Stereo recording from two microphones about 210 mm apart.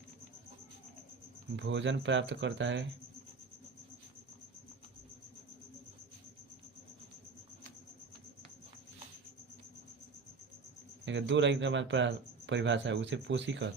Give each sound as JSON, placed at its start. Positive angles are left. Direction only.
{"t": 1.5, "sound": "speech", "side_deg": -60}
{"t": 11.0, "sound": "speech", "side_deg": -60}